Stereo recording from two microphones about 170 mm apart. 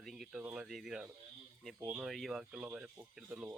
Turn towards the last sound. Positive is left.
turn(degrees=-5)  # may be behind; listen again after turning